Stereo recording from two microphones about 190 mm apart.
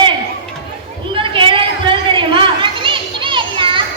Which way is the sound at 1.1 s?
25° right (ahead or behind).